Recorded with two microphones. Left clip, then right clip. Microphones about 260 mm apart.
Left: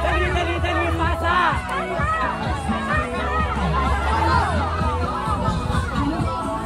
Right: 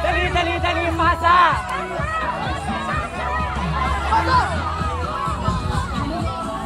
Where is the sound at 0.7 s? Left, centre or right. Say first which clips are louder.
Right 3 dB; right.